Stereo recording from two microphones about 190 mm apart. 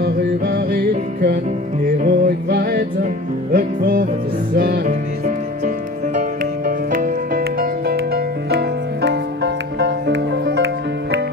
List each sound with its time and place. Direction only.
0.0 s music: 60° right (ahead or behind)
6.9 s music: 50° right (ahead or behind)